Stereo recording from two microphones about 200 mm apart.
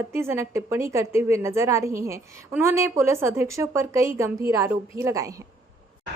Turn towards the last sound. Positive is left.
turn(degrees=-15)  # may be behind; listen again after turning